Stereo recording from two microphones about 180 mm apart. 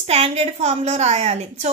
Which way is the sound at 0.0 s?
35° right (ahead or behind).